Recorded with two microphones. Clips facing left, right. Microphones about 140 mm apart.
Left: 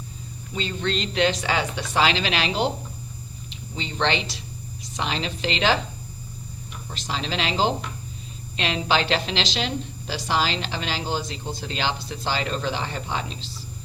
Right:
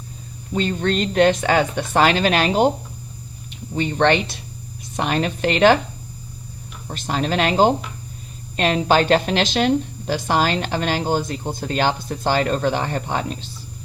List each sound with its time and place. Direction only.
0.5 s a woman's voice: 50° right (ahead or behind)
6.8 s a woman's voice: 50° right (ahead or behind)